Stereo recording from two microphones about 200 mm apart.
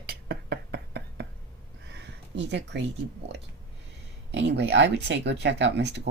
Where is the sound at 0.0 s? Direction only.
50° right (ahead or behind).